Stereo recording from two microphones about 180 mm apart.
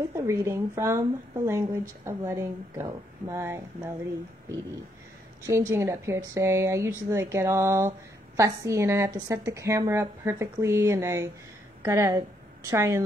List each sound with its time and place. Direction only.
0.1 s speech: 15° right (ahead or behind)
5.5 s speech: 15° right (ahead or behind)